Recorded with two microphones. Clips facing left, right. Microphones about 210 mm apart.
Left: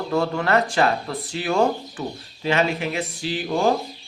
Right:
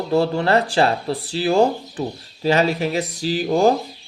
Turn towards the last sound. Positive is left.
turn(degrees=-40)  # may be behind; listen again after turning